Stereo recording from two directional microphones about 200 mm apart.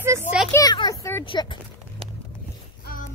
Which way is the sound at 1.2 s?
25° left (ahead or behind).